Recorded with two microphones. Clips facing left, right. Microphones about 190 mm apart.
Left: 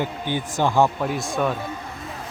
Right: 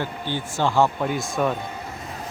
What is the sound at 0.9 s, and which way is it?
Speech, centre (ahead or behind).